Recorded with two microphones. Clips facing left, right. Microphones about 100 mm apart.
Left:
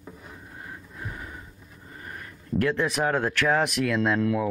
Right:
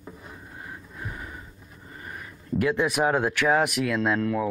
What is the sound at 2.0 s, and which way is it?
Speech, 5° right (ahead or behind).